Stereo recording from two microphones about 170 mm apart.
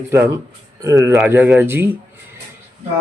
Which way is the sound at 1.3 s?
10° right (ahead or behind).